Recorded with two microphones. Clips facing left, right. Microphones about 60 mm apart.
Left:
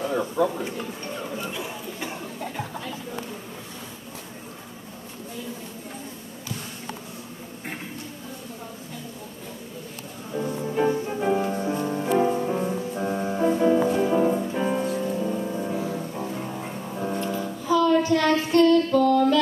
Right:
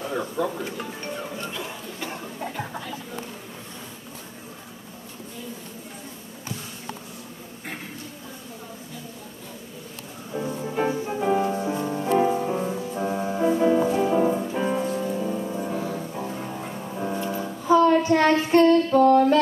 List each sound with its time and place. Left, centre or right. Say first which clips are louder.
0.0 s a sound: left 3 dB; centre
10.3 s music: left 1 dB; centre
17.6 s female singing: right 2 dB; right